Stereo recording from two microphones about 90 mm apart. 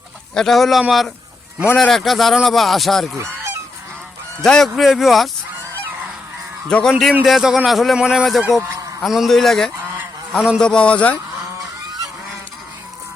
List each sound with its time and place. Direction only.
0.3 s a man's voice: 5° left (ahead or behind)
4.4 s a man's voice: 5° left (ahead or behind)
6.7 s speech: 10° left (ahead or behind)
7.3 s a man's voice: 5° right (ahead or behind)
10.6 s speech: 10° left (ahead or behind)